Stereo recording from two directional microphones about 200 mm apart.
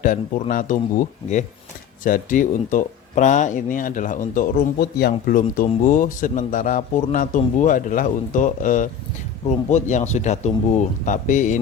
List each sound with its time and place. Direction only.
0.0 s speech: 40° left (ahead or behind)